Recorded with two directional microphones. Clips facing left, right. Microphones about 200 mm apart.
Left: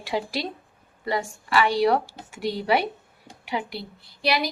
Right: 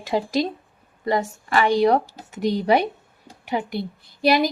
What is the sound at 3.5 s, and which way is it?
Speech, 45° right (ahead or behind).